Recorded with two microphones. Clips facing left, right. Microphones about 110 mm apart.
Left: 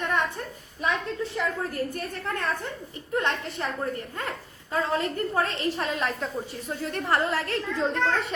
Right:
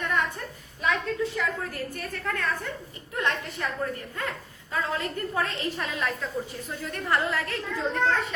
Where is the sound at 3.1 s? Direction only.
35° left (ahead or behind).